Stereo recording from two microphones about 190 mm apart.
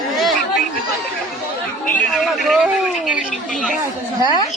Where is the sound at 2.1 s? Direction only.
Centre (ahead or behind).